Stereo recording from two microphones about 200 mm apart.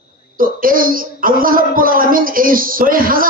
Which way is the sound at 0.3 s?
45° right (ahead or behind).